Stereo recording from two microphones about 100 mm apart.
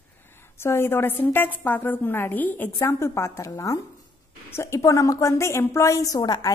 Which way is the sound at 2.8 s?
30° left (ahead or behind).